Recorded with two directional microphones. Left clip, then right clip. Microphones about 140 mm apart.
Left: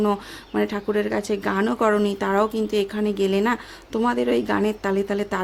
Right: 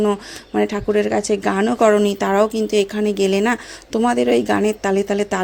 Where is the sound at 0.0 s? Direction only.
10° right (ahead or behind).